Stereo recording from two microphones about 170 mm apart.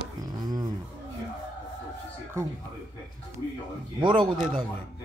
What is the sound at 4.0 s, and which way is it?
Speech, 25° right (ahead or behind).